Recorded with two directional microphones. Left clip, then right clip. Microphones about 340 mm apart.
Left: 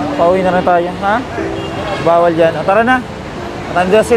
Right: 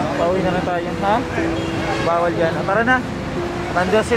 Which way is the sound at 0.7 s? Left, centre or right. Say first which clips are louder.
Left 7 dB; centre.